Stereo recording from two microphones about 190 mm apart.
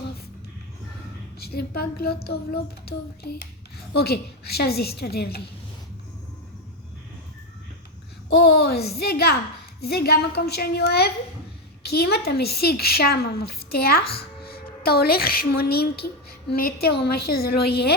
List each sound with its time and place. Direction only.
1.4 s a woman's voice: 55° left (ahead or behind)
8.3 s a woman's voice: 55° left (ahead or behind)